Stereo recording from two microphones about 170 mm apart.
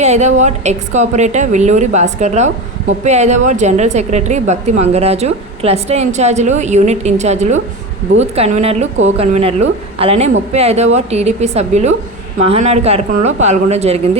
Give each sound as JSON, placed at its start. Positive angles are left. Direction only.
{"t": 0.0, "sound": "a woman's voice", "side_deg": -40}